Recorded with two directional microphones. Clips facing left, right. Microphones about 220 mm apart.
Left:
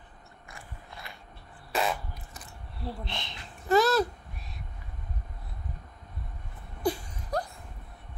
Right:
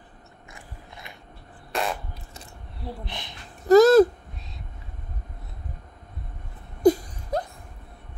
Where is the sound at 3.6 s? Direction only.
45° right (ahead or behind).